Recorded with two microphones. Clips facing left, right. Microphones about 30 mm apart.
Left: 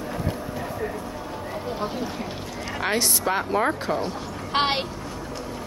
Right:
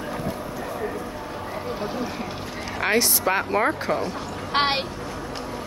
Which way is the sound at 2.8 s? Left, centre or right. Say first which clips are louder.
Right 3 dB; centre.